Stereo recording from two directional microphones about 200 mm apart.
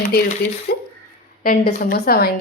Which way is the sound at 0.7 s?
50° left (ahead or behind).